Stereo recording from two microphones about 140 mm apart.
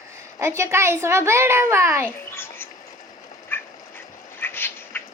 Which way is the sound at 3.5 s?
15° left (ahead or behind).